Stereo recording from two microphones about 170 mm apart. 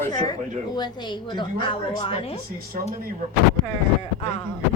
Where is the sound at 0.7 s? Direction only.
25° left (ahead or behind).